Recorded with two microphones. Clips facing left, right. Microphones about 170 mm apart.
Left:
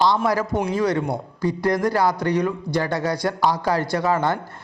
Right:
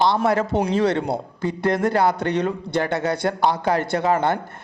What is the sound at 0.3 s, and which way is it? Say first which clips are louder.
A man's voice: right 2 dB; 25° right (ahead or behind).